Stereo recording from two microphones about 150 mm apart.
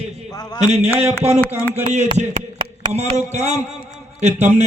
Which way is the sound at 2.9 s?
45° right (ahead or behind).